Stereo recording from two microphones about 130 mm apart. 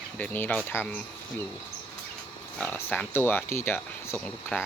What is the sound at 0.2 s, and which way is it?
Speech, 10° left (ahead or behind).